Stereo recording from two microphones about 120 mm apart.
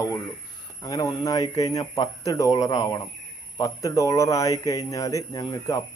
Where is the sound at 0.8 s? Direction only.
30° left (ahead or behind).